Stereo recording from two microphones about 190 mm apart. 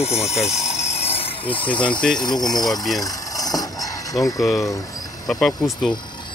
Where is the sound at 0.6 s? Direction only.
35° left (ahead or behind).